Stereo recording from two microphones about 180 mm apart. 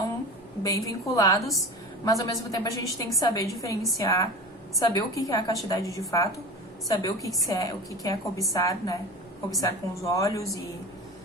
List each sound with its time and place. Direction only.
0.6 s a woman's voice: 20° left (ahead or behind)